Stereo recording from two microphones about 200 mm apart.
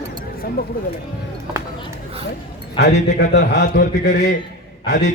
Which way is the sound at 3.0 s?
60° left (ahead or behind).